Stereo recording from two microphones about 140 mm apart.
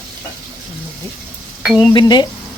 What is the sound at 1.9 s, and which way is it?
Speech, 30° left (ahead or behind).